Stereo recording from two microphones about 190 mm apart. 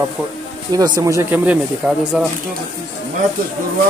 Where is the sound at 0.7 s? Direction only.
20° right (ahead or behind).